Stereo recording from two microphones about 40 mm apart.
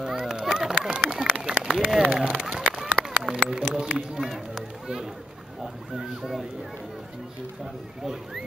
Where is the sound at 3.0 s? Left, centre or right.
Centre.